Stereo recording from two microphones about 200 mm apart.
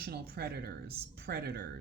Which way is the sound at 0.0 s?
50° right (ahead or behind).